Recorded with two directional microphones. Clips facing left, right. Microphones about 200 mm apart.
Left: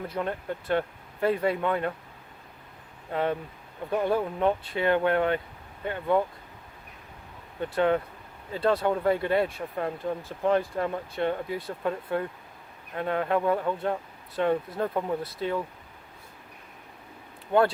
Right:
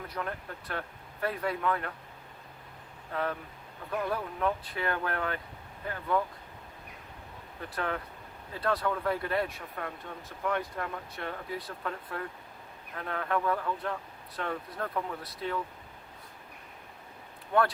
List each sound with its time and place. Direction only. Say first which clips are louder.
0.1 s speech: left 7 dB; 25° left (ahead or behind)
3.1 s speech: left 6 dB; 25° left (ahead or behind)
7.6 s speech: left 10 dB; 25° left (ahead or behind)